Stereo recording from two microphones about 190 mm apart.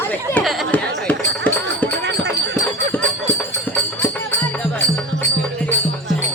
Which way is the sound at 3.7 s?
10° left (ahead or behind).